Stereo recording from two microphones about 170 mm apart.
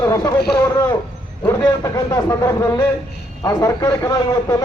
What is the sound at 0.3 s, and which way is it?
Speech, 70° left (ahead or behind).